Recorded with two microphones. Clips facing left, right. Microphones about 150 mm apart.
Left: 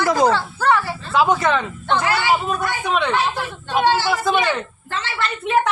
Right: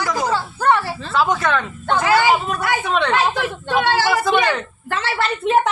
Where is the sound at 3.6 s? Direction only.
65° right (ahead or behind).